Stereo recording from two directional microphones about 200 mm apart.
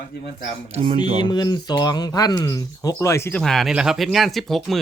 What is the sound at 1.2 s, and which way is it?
Speech, 20° left (ahead or behind).